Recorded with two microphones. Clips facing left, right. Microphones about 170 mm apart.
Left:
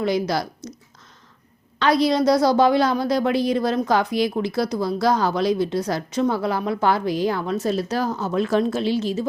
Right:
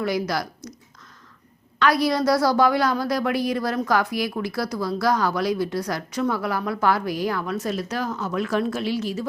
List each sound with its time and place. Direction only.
0.0 s speech: 25° left (ahead or behind)
1.8 s a woman's voice: 25° left (ahead or behind)